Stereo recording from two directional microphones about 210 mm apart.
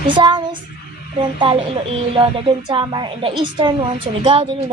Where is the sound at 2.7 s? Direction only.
20° right (ahead or behind).